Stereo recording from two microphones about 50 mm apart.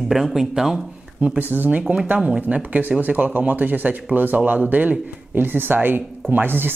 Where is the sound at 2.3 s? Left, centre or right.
Right.